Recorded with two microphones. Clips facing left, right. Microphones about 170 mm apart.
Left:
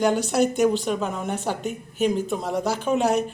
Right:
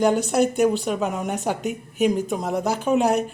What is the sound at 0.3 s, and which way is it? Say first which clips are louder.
A woman's voice: right 1 dB; 10° right (ahead or behind).